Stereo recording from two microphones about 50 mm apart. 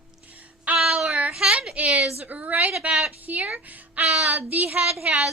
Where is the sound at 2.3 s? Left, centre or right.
Right.